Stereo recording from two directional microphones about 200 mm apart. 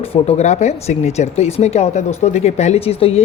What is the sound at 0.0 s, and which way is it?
Speech, 30° left (ahead or behind).